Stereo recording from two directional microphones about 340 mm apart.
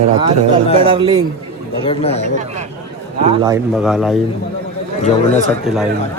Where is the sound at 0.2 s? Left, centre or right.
Centre.